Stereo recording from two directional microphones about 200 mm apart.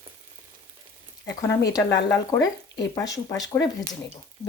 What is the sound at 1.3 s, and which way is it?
Speech, 15° left (ahead or behind).